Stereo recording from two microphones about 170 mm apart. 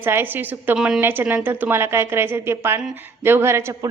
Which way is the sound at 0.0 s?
10° right (ahead or behind).